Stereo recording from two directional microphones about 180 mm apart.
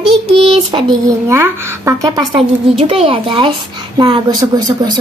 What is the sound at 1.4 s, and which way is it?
A woman's voice, 15° right (ahead or behind).